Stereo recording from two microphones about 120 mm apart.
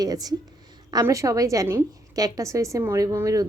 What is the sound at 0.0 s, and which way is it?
A woman's voice, 30° right (ahead or behind).